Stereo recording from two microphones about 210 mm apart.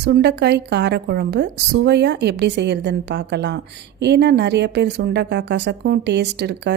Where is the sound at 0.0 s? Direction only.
50° right (ahead or behind).